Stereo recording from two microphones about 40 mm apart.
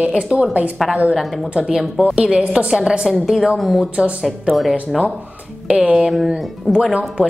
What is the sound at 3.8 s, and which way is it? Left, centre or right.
Speech, right.